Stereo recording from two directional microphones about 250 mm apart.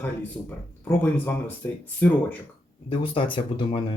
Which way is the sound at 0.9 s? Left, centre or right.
Centre.